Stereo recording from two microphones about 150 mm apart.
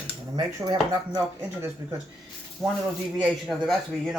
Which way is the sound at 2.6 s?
Centre (ahead or behind).